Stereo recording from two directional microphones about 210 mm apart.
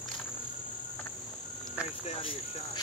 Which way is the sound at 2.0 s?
25° left (ahead or behind).